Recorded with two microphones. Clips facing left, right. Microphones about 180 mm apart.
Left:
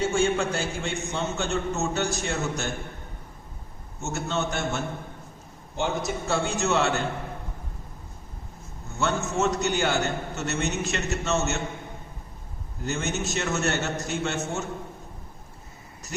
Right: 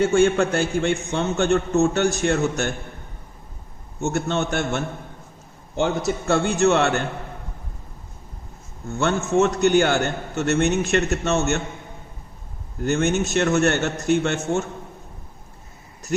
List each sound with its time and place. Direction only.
0.0 s a man's voice: 60° right (ahead or behind)
4.0 s a man's voice: 60° right (ahead or behind)
6.2 s a man's voice: 60° right (ahead or behind)
9.0 s a man's voice: 60° right (ahead or behind)
12.8 s a man's voice: 55° right (ahead or behind)